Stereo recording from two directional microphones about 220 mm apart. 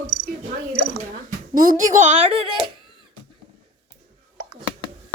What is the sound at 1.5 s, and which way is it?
A woman's voice, 40° right (ahead or behind).